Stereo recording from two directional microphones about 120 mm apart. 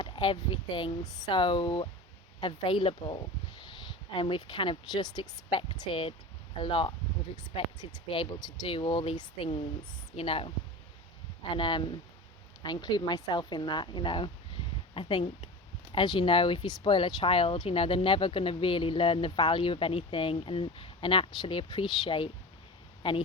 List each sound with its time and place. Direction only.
0.0 s a woman's voice: 45° left (ahead or behind)